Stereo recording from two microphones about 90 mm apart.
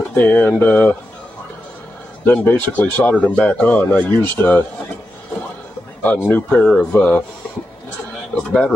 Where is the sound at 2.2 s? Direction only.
20° left (ahead or behind).